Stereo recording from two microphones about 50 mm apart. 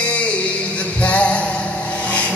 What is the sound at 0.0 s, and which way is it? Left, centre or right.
Music, left.